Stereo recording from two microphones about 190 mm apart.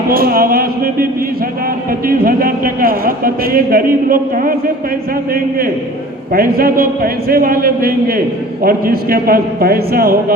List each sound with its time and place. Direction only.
0.1 s a man's voice: 50° right (ahead or behind)
2.0 s a man's voice: 50° right (ahead or behind)
6.3 s a man's voice: 50° right (ahead or behind)